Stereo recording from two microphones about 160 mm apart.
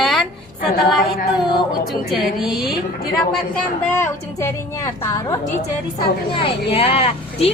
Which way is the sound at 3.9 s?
15° left (ahead or behind).